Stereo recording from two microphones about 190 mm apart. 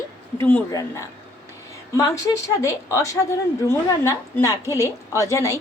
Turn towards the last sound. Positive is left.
turn(degrees=15)  # may be behind; listen again after turning